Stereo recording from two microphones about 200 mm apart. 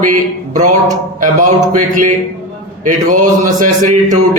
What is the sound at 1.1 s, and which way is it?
Speech, 40° right (ahead or behind).